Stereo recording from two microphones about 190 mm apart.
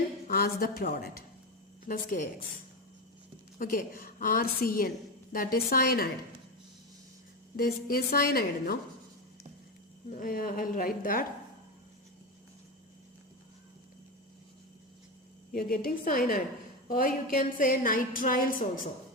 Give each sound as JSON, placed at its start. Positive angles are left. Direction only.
{"t": 0.3, "sound": "a woman's voice", "side_deg": 50}
{"t": 3.6, "sound": "a woman's voice", "side_deg": 45}
{"t": 7.5, "sound": "a woman's voice", "side_deg": 50}
{"t": 10.1, "sound": "a woman's voice", "side_deg": 45}
{"t": 15.5, "sound": "a woman's voice", "side_deg": 50}